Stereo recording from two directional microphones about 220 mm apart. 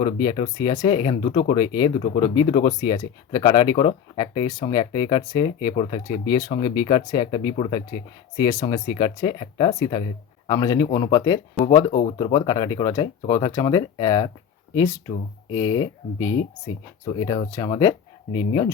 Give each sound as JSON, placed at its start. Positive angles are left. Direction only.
{"t": 0.0, "sound": "speech", "side_deg": 20}
{"t": 17.5, "sound": "speech", "side_deg": 15}